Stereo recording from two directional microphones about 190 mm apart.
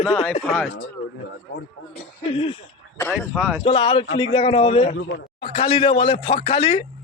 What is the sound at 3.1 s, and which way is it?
Speech, 5° right (ahead or behind).